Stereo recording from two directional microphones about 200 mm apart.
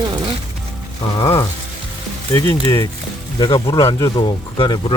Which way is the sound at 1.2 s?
25° left (ahead or behind).